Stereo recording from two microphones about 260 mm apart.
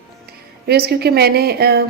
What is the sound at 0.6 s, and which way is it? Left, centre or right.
A woman's voice, right.